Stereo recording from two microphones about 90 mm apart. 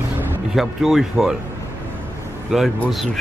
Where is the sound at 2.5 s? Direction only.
Centre (ahead or behind).